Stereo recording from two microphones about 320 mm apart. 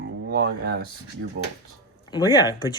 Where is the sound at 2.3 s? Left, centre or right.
Centre.